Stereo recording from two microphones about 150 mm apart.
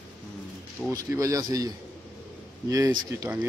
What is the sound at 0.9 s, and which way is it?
Speech, 20° right (ahead or behind).